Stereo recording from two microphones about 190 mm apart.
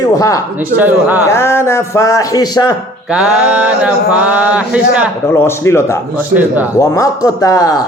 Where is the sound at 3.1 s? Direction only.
5° right (ahead or behind).